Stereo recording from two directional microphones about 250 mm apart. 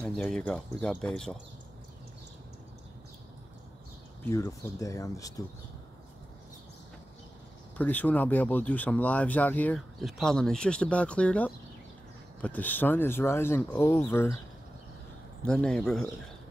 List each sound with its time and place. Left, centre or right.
0.0 s speech: centre
4.3 s speech: centre
7.7 s speech: centre
15.4 s speech: centre